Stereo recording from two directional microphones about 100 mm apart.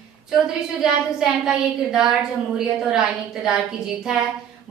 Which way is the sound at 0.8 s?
5° right (ahead or behind).